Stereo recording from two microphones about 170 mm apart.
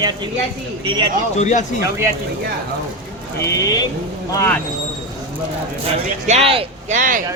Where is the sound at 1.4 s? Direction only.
45° left (ahead or behind).